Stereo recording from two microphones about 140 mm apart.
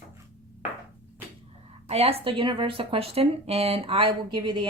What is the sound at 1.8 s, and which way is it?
Speech, 45° right (ahead or behind).